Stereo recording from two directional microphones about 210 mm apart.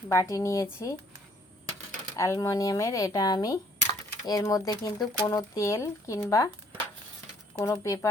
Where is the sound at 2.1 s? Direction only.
15° left (ahead or behind).